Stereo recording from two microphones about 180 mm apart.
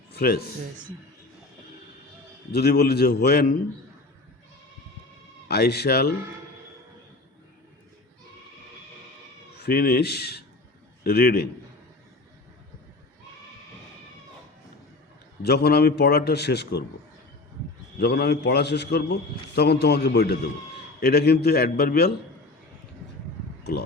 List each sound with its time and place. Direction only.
0.1 s a sound: 60° left (ahead or behind)
2.5 s a man's voice: 65° left (ahead or behind)
5.5 s a man's voice: 65° left (ahead or behind)
9.6 s a man's voice: 60° left (ahead or behind)
15.4 s a man's voice: 60° left (ahead or behind)
18.0 s a man's voice: 60° left (ahead or behind)